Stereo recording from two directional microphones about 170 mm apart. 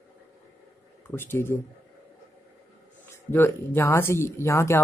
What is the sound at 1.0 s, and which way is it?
Speech, 15° left (ahead or behind).